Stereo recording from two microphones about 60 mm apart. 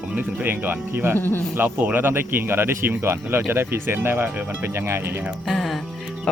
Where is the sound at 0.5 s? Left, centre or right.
Right.